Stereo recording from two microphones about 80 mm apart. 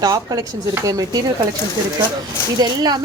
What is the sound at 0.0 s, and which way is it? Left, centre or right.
Speech, right.